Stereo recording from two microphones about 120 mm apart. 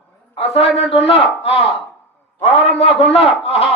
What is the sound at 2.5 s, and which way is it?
Speech, 55° left (ahead or behind).